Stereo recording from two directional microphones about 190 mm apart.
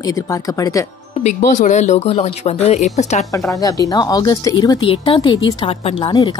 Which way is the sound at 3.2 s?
15° left (ahead or behind).